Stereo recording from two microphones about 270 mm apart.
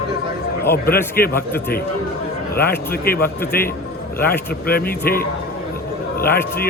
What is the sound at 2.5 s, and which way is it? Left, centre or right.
Speech, left.